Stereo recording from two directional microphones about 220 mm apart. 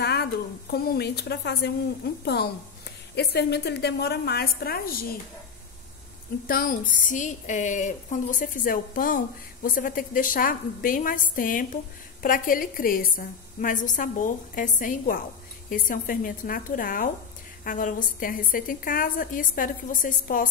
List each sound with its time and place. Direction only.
0.0 s a woman's voice: 50° left (ahead or behind)
6.4 s speech: 40° left (ahead or behind)